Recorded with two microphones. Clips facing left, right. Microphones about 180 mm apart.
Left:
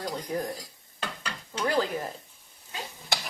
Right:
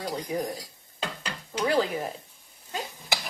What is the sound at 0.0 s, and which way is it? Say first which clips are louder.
Cutlery: right 1 dB; 10° right (ahead or behind).